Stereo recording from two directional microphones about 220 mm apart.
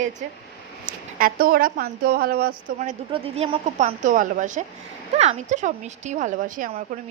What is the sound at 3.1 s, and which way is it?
A woman's voice, 25° right (ahead or behind).